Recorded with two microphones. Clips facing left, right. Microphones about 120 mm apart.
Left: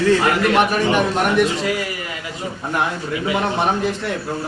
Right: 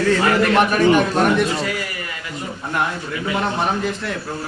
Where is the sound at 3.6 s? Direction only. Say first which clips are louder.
Left 2 dB; 20° left (ahead or behind).